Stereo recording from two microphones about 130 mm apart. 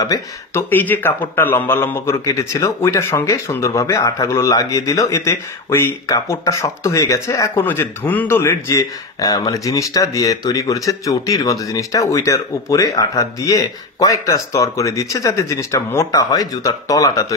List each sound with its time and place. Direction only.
0.0 s a man's voice: 25° left (ahead or behind)
0.7 s a man's voice: 15° left (ahead or behind)